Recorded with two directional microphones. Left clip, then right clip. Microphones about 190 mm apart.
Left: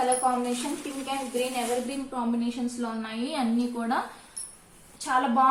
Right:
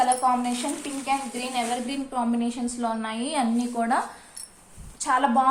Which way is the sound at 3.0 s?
35° right (ahead or behind).